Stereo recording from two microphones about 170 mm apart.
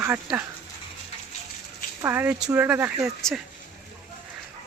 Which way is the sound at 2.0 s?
10° right (ahead or behind).